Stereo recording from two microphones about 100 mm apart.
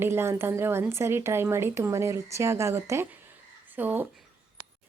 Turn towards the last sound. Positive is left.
turn(degrees=-20)  # may be behind; listen again after turning